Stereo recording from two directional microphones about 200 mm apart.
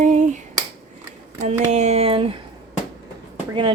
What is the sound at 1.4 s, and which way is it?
Speech, 35° right (ahead or behind).